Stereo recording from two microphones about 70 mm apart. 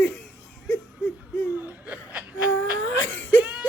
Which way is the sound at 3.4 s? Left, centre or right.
Right.